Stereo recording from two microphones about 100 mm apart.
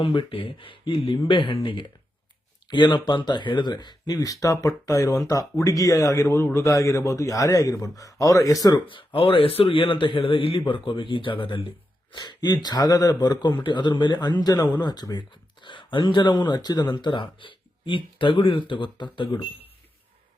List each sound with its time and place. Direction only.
0.0 s a man's voice: 55° left (ahead or behind); by 8.8 s 35° left (ahead or behind)
8.9 s a man's voice: 65° left (ahead or behind)
12.1 s a man's voice: 50° left (ahead or behind)
15.6 s a man's voice: 55° left (ahead or behind)